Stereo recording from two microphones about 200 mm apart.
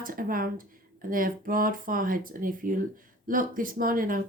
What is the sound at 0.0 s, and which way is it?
Speech, 45° right (ahead or behind).